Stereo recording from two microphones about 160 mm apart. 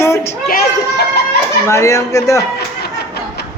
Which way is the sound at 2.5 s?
90° left.